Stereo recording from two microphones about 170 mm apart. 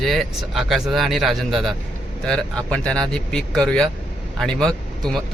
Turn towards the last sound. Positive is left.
turn(degrees=5)  # may be behind; listen again after turning